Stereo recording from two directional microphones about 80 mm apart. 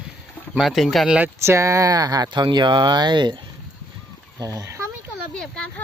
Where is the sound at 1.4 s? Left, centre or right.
Right.